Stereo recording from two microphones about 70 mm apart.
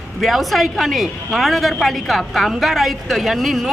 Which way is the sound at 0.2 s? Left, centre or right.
Centre.